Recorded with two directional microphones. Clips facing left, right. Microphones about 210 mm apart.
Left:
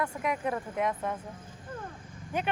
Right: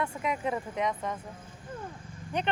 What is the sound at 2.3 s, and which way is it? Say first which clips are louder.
Speech: right 1 dB; 5° left (ahead or behind).